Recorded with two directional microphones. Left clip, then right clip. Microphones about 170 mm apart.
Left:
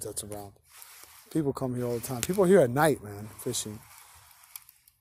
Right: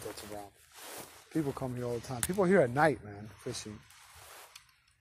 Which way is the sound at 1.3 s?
60° left (ahead or behind).